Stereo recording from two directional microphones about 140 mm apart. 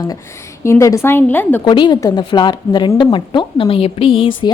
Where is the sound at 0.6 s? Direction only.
20° left (ahead or behind).